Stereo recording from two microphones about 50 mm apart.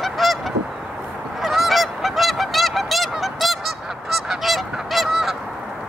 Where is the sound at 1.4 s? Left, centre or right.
Centre.